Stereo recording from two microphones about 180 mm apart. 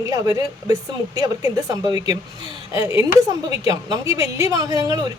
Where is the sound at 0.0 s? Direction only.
20° right (ahead or behind).